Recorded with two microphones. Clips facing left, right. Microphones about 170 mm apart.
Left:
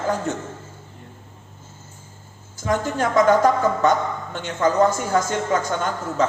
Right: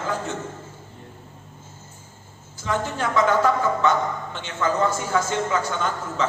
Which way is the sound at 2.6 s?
45° left (ahead or behind).